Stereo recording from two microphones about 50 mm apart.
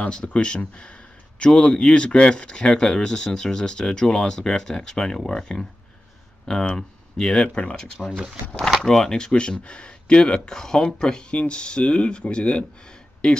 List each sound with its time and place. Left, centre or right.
0.0 s speech: left